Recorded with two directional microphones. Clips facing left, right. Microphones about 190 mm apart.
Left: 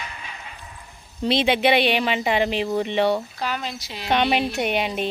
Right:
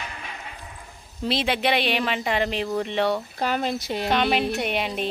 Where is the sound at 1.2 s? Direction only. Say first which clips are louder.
Left 4 dB; centre (ahead or behind).